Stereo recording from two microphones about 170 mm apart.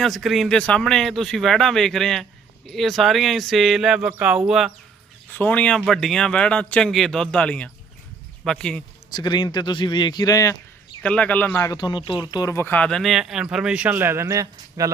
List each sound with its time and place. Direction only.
0.0 s a man's voice: centre (ahead or behind)
5.3 s a man's voice: 10° left (ahead or behind)
9.1 s speech: 25° left (ahead or behind)
11.0 s speech: 5° left (ahead or behind); by 14.8 s 20° right (ahead or behind)